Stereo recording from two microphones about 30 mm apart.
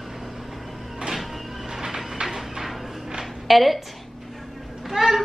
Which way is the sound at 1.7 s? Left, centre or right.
Centre.